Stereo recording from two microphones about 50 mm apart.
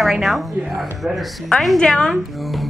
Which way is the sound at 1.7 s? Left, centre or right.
Centre.